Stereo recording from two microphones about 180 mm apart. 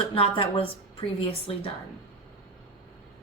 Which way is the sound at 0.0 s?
30° left (ahead or behind).